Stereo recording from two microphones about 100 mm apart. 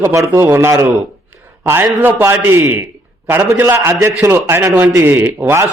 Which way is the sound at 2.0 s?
20° right (ahead or behind).